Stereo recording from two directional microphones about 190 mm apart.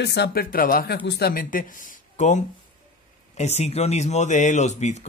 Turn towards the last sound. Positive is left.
turn(degrees=35)  # may be behind; listen again after turning